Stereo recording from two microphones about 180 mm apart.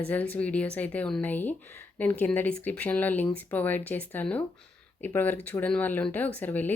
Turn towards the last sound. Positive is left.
turn(degrees=10)  # may be behind; listen again after turning